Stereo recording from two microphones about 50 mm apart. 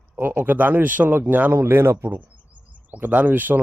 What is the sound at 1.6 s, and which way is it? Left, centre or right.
Speech, right.